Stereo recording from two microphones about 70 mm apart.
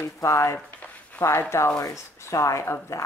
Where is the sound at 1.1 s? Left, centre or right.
Left.